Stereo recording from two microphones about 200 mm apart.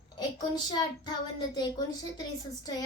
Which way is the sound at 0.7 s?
20° left (ahead or behind).